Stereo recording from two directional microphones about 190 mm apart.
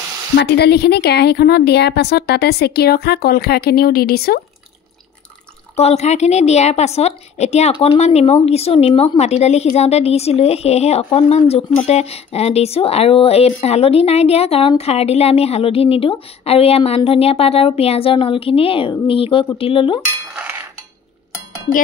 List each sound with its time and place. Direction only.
0.4 s a woman's voice: 60° left (ahead or behind)
5.8 s speech: 35° left (ahead or behind)
20.3 s cutlery: 10° right (ahead or behind)